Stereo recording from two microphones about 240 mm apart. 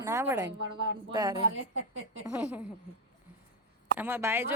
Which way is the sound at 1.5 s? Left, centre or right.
Right.